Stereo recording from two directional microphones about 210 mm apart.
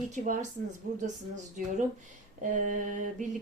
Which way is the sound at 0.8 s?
40° right (ahead or behind).